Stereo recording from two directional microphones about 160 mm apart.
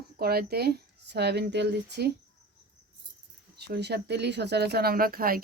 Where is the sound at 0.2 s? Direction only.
75° right (ahead or behind).